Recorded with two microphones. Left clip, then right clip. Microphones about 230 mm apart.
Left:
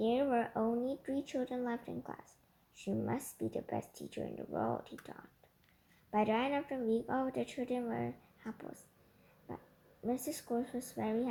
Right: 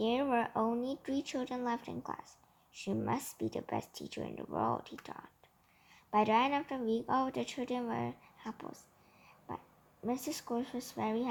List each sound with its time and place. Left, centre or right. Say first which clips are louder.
0.0 s speech: right 1 dB; right
10.1 s speech: even; right